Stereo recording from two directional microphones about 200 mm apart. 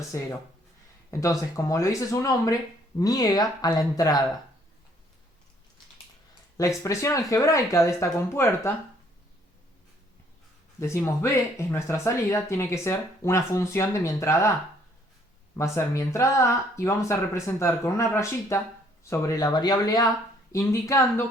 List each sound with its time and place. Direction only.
1.1 s speech: 15° left (ahead or behind)
6.6 s speech: 15° left (ahead or behind)
10.8 s speech: 15° left (ahead or behind)
15.5 s speech: 15° left (ahead or behind)